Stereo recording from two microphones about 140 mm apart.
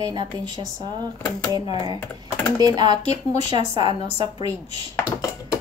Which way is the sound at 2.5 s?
30° right (ahead or behind).